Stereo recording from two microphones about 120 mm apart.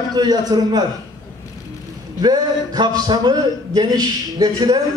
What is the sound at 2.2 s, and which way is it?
A man's voice, 35° right (ahead or behind).